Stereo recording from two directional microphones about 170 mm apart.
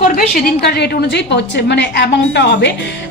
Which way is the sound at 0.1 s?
70° left (ahead or behind).